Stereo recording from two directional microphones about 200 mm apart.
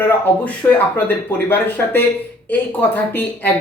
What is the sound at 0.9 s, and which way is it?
Speech, 10° left (ahead or behind).